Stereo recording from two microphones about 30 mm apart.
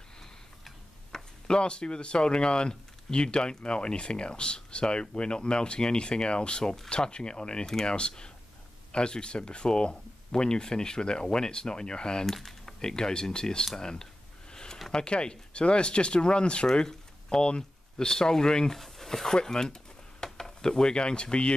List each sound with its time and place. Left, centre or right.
1.1 s speech: left
7.6 s speech: centre
8.9 s speech: left
12.4 s typing: centre
12.8 s speech: left
14.5 s a sound: left
14.9 s speech: left
18.7 s speech: centre
19.3 s a sound: left
20.3 s speech: left